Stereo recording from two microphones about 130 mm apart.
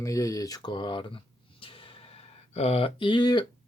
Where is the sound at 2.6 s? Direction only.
50° left (ahead or behind); by 3.4 s 35° left (ahead or behind).